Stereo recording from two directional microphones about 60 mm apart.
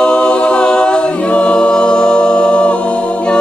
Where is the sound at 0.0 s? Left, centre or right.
Centre.